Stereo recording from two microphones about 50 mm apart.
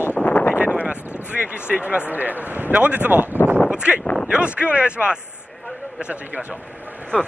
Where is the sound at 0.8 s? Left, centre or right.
Right.